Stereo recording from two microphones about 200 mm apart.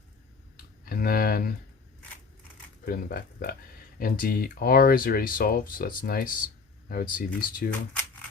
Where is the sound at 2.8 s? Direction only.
45° left (ahead or behind).